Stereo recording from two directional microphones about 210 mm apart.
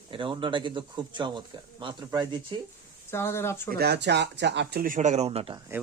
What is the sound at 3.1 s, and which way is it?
Speech, 10° left (ahead or behind).